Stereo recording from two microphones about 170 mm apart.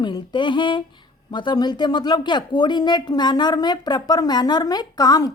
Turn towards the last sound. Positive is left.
turn(degrees=20)  # may be behind; listen again after turning